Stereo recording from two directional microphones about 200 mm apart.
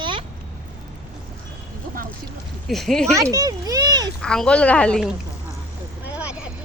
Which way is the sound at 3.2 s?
15° right (ahead or behind).